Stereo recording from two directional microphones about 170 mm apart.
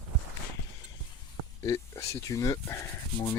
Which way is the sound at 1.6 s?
20° left (ahead or behind).